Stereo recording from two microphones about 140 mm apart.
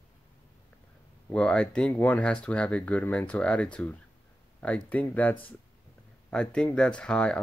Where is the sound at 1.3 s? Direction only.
5° left (ahead or behind).